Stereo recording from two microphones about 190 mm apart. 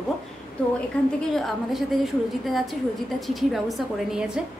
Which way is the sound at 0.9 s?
5° left (ahead or behind).